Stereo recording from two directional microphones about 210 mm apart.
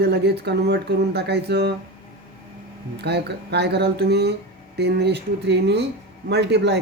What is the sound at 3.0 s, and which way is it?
Speech, 50° right (ahead or behind).